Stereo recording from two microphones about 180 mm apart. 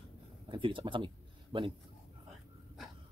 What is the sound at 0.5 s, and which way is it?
Speech, 30° right (ahead or behind).